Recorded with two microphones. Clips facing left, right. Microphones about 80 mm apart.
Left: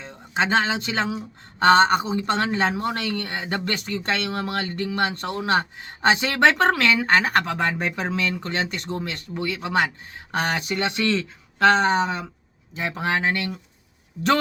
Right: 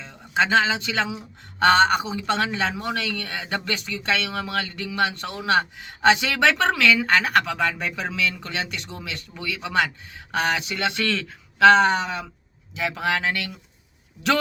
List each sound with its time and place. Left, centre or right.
0.0 s speech: left